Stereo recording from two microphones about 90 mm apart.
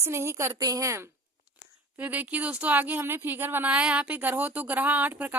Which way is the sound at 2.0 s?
20° right (ahead or behind).